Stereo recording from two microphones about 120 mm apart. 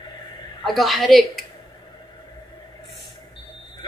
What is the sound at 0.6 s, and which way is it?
Speech, centre (ahead or behind).